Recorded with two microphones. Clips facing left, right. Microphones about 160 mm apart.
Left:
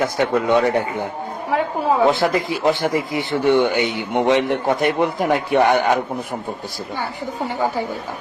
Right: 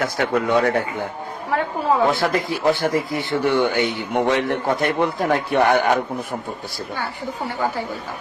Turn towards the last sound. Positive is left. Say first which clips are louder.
# left 2 dB
turn(degrees=15)  # may be behind; listen again after turning